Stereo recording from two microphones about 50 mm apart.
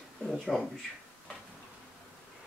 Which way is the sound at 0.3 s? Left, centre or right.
Centre.